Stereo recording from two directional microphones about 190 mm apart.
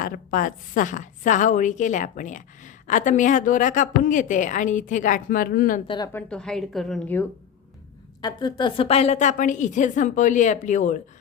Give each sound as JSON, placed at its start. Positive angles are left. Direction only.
{"t": 0.0, "sound": "a woman's voice", "side_deg": 45}
{"t": 6.1, "sound": "speech", "side_deg": 5}
{"t": 8.2, "sound": "a woman's voice", "side_deg": 25}